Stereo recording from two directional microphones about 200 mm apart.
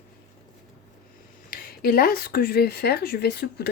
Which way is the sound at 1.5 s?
50° left (ahead or behind).